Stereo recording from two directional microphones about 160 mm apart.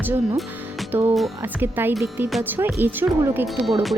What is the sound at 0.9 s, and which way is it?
Speech, 15° right (ahead or behind).